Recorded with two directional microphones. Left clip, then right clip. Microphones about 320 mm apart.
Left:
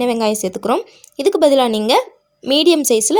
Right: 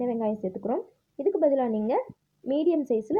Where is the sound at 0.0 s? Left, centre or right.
Left.